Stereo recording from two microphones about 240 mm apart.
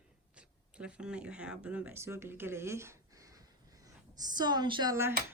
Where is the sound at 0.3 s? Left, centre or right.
Centre.